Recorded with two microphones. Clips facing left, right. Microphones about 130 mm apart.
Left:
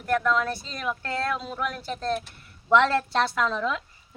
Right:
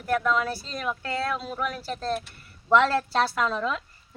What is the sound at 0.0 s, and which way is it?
A woman's voice, 5° right (ahead or behind).